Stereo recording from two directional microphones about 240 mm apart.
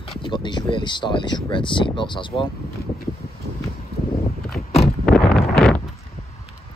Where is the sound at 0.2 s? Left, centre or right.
Centre.